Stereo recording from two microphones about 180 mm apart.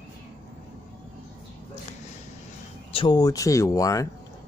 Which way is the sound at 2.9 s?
25° left (ahead or behind).